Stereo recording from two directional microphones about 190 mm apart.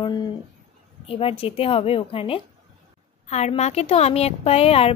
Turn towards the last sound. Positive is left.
turn(degrees=30)  # may be behind; listen again after turning